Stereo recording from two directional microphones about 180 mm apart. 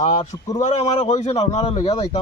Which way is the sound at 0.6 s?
40° left (ahead or behind).